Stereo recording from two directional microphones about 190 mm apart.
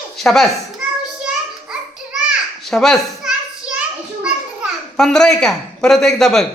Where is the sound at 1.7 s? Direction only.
5° right (ahead or behind).